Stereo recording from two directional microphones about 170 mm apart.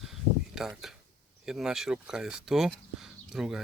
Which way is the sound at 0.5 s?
Centre (ahead or behind).